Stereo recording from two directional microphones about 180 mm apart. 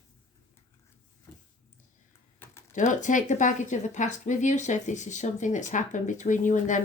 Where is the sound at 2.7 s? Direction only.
45° left (ahead or behind).